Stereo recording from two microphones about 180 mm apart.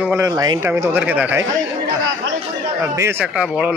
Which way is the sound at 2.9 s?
10° right (ahead or behind).